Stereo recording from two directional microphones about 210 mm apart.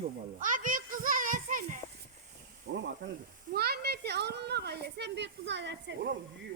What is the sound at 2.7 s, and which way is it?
Sizzle, 55° right (ahead or behind).